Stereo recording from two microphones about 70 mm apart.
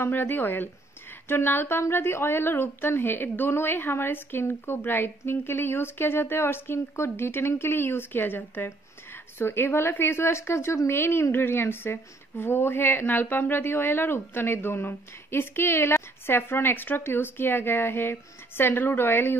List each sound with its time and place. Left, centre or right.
0.0 s a woman's voice: left